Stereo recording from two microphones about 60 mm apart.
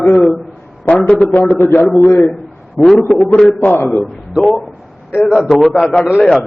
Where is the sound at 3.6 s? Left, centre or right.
Left.